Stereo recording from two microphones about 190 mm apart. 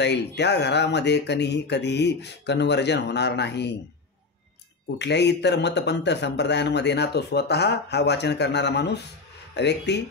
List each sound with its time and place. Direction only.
0.0 s speech: 65° left (ahead or behind)
4.9 s speech: 65° left (ahead or behind)